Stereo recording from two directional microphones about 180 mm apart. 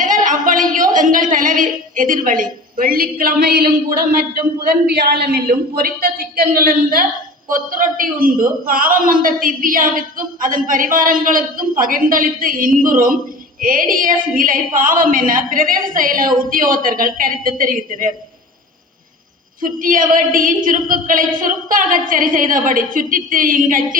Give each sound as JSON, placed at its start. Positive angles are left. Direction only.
{"t": 0.0, "sound": "a sound", "side_deg": -45}
{"t": 4.7, "sound": "a man's voice", "side_deg": -60}
{"t": 19.6, "sound": "a man's voice", "side_deg": -50}